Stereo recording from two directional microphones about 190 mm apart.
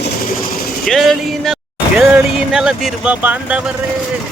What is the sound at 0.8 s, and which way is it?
Speech, centre (ahead or behind).